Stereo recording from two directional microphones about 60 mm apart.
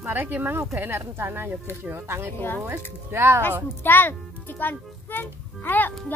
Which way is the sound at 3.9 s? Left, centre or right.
Left.